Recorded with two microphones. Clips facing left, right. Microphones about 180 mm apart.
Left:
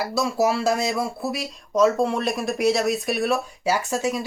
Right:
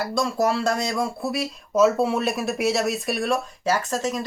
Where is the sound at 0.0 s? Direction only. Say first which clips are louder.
Left 1 dB; 5° left (ahead or behind).